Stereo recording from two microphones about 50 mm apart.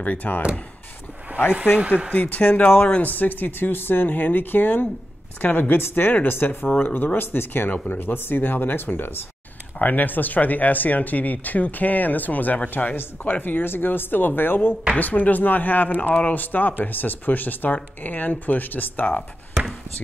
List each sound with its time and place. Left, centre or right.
0.0 s speech: left
2.1 s speech: left
7.7 s speech: left
8.0 s speech: left
15.0 s speech: left